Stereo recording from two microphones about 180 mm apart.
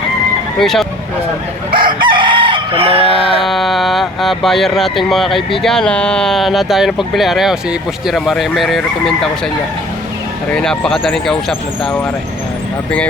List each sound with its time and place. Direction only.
0.6 s speech: centre (ahead or behind)
1.7 s chicken: 25° right (ahead or behind)
3.4 s speech: centre (ahead or behind)
10.5 s speech: 5° left (ahead or behind)